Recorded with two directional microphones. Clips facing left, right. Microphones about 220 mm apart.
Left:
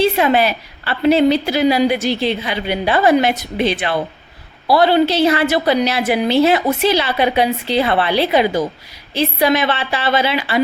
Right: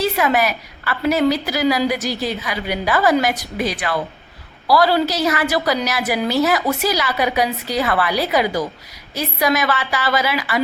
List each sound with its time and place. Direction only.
0.0 s a woman's voice: 25° left (ahead or behind)